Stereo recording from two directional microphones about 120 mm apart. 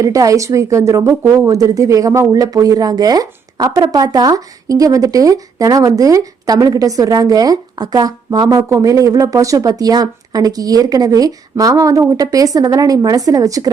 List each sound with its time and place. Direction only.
0.0 s speech: 30° right (ahead or behind)